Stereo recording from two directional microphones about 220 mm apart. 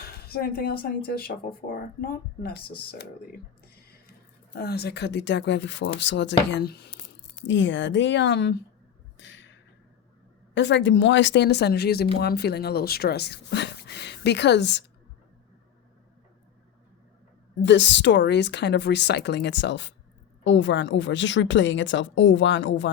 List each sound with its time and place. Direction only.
0.0 s speech: 45° left (ahead or behind)
4.5 s a woman's voice: 45° left (ahead or behind)
9.1 s a sound: 55° left (ahead or behind)
10.5 s speech: 55° left (ahead or behind)
17.6 s a woman's voice: 55° left (ahead or behind)